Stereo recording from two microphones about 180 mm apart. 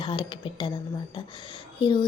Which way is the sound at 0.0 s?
25° left (ahead or behind).